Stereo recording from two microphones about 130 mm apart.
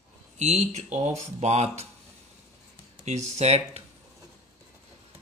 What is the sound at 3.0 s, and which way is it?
Speech, 60° right (ahead or behind).